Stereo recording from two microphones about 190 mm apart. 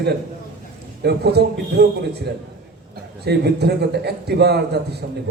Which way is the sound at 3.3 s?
60° right (ahead or behind).